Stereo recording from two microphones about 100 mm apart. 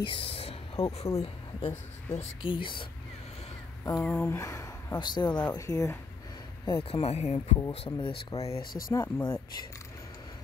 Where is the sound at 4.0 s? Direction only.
20° left (ahead or behind); by 5.4 s 45° left (ahead or behind).